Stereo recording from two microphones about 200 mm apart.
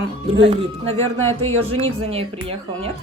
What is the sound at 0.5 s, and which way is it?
A woman's voice, 30° right (ahead or behind).